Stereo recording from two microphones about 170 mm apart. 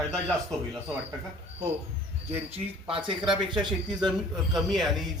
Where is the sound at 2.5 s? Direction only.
30° right (ahead or behind).